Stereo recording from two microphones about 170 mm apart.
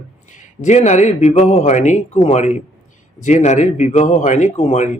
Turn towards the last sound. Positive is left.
turn(degrees=40)  # may be behind; listen again after turning